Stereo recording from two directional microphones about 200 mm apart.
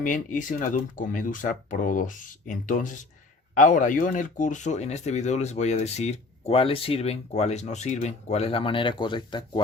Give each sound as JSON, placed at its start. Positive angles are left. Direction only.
{"t": 0.0, "sound": "speech", "side_deg": 40}